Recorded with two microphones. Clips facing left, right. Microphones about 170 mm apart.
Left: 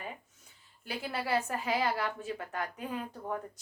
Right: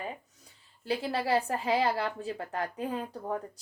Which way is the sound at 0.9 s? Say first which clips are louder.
Right 5 dB; 30° right (ahead or behind).